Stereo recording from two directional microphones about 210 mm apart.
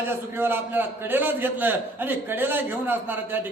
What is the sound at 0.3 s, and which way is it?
A man's voice, 10° right (ahead or behind).